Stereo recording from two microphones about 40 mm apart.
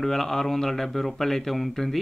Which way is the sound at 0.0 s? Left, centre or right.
Centre.